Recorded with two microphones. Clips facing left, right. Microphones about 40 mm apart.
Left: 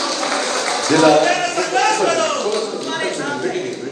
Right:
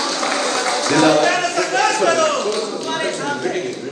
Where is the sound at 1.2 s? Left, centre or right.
Right.